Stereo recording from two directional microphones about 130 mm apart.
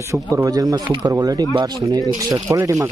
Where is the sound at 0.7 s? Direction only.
35° right (ahead or behind).